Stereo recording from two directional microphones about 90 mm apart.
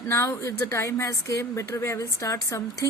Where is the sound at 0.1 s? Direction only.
30° left (ahead or behind).